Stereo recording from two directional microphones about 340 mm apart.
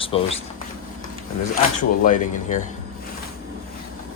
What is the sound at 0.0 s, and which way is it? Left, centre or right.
Speech, centre.